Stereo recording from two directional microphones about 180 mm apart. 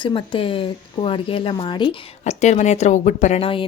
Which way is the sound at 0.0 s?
25° left (ahead or behind).